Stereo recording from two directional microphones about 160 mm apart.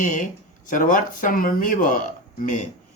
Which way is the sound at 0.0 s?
50° left (ahead or behind).